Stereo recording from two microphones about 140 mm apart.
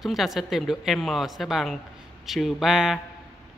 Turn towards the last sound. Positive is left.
turn(degrees=0)  # may be behind; listen again after turning